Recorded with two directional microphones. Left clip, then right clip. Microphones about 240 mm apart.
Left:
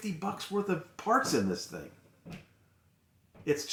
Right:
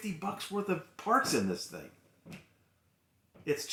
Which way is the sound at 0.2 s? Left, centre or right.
Right.